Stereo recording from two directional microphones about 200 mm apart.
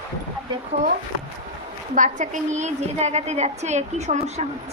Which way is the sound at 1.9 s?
40° right (ahead or behind).